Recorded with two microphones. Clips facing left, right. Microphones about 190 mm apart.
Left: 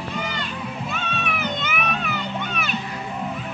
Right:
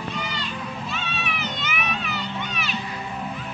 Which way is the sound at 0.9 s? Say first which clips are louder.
Left 3 dB; 50° left (ahead or behind).